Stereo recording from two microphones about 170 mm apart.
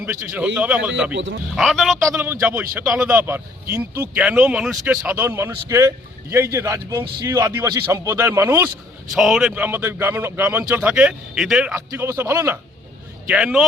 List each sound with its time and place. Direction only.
0.0 s a man's voice: 5° right (ahead or behind)
1.1 s speech: 90° right
1.5 s a man's voice: centre (ahead or behind)
2.1 s a man's voice: 10° right (ahead or behind)
5.1 s a man's voice: 15° right (ahead or behind)
9.1 s a man's voice: 5° right (ahead or behind)
11.7 s a man's voice: 15° right (ahead or behind)